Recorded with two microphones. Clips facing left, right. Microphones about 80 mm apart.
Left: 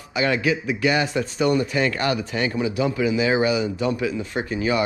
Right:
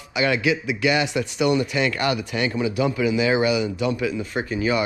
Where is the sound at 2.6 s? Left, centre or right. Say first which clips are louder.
Right 1 dB; right.